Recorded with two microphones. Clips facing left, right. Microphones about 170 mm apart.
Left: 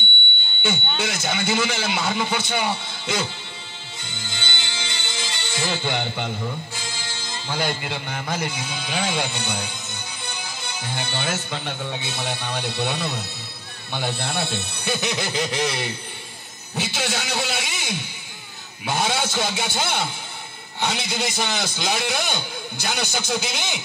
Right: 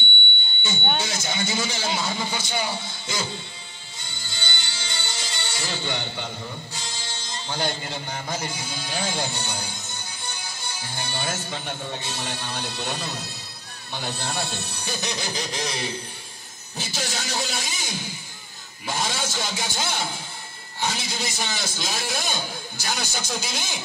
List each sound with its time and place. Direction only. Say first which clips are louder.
0.9 s a man's voice: left 2 dB; 60° left (ahead or behind)
4.4 s a man's voice: left 1 dB; 65° left (ahead or behind)